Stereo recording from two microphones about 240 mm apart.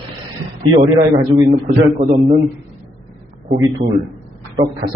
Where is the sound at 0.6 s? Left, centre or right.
Right.